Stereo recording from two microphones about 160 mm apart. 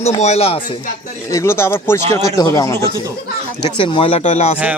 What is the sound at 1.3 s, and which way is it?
Speech, 20° left (ahead or behind).